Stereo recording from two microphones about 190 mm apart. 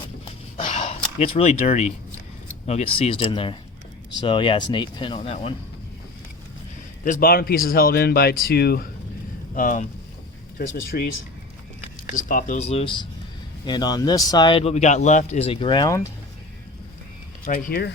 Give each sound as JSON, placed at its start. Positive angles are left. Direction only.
{"t": 0.5, "sound": "a sound", "side_deg": 30}
{"t": 1.2, "sound": "speech", "side_deg": 30}
{"t": 7.0, "sound": "speech", "side_deg": 45}
{"t": 9.6, "sound": "speech", "side_deg": 45}
{"t": 10.9, "sound": "speech", "side_deg": 45}
{"t": 12.1, "sound": "speech", "side_deg": 45}
{"t": 17.4, "sound": "speech", "side_deg": 55}